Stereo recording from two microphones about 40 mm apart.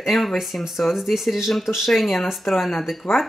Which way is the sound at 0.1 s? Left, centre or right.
Centre.